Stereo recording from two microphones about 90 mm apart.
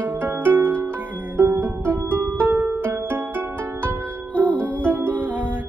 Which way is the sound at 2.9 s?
25° right (ahead or behind).